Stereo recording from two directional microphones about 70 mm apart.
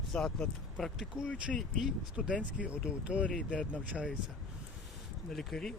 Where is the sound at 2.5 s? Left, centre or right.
Centre.